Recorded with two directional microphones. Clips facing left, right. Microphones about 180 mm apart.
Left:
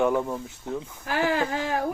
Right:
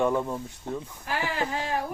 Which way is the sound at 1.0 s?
50° left (ahead or behind).